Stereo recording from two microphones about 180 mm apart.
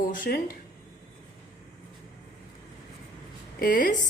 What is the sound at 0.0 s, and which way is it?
Speech, 50° left (ahead or behind).